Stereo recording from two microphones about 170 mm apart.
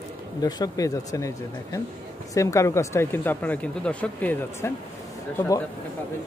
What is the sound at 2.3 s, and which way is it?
Speech, 20° left (ahead or behind).